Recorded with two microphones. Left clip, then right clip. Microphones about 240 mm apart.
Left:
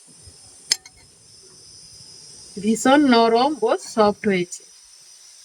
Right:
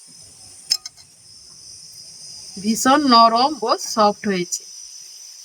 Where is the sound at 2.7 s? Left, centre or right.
Centre.